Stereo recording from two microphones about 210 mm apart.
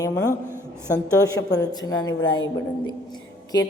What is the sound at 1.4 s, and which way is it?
A woman's voice, 15° left (ahead or behind).